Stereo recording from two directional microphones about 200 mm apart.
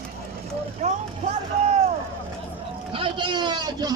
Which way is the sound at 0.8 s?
40° right (ahead or behind).